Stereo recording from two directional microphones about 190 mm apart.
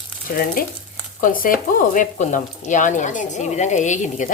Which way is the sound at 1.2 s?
45° left (ahead or behind).